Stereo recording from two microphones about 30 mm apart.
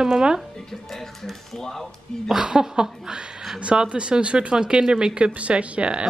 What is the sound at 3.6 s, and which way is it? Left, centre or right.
Speech, right.